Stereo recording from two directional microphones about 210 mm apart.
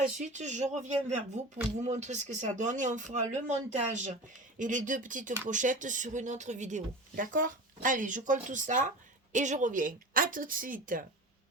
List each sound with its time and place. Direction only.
0.2 s speech: 35° right (ahead or behind)